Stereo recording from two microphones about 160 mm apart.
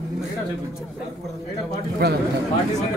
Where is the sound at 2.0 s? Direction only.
90° right.